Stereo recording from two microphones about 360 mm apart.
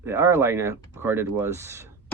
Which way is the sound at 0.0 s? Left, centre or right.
Centre.